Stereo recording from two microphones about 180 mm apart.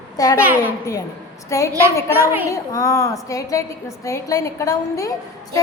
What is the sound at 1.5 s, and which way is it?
Speech, 15° left (ahead or behind).